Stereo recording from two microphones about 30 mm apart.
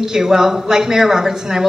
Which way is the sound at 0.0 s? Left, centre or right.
Centre.